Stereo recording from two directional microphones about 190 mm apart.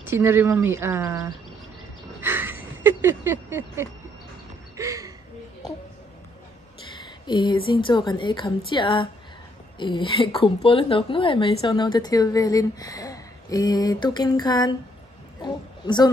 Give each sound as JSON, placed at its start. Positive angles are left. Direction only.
{"t": 0.0, "sound": "speech", "side_deg": -10}
{"t": 2.2, "sound": "a sound", "side_deg": -10}
{"t": 7.2, "sound": "a woman's voice", "side_deg": 25}